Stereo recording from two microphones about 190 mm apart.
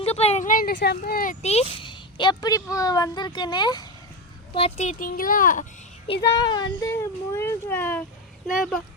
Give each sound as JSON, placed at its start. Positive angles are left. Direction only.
{"t": 0.0, "sound": "speech", "side_deg": 30}
{"t": 1.8, "sound": "speech", "side_deg": 25}
{"t": 4.5, "sound": "speech", "side_deg": 35}
{"t": 6.2, "sound": "a child's voice", "side_deg": 20}